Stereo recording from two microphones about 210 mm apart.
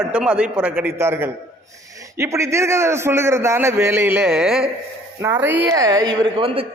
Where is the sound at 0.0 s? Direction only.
5° right (ahead or behind).